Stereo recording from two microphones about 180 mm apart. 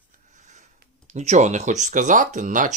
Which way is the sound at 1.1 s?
40° right (ahead or behind).